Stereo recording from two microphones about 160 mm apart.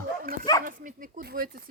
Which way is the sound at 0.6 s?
55° right (ahead or behind).